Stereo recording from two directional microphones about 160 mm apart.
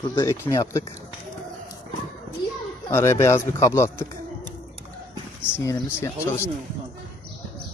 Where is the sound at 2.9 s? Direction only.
15° left (ahead or behind).